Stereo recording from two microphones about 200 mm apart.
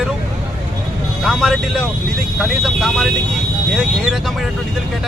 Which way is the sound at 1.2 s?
Centre (ahead or behind).